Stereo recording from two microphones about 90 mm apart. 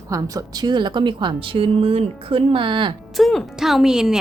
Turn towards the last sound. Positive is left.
turn(degrees=-5)  # may be behind; listen again after turning